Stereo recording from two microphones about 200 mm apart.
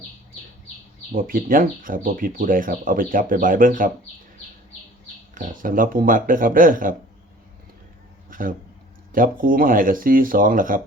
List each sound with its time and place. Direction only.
1.1 s speech: 45° right (ahead or behind)
5.3 s speech: 40° right (ahead or behind)
8.3 s a sound: 45° right (ahead or behind)
9.1 s speech: 45° right (ahead or behind)